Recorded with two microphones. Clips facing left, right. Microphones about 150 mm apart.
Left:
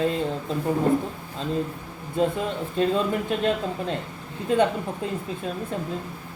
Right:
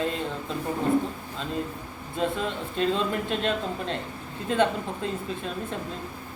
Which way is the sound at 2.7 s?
15° left (ahead or behind).